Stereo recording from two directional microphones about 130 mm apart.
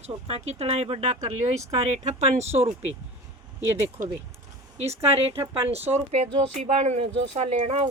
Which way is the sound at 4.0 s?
80° right.